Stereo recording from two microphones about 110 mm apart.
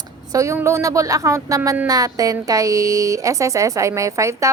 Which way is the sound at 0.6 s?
25° right (ahead or behind).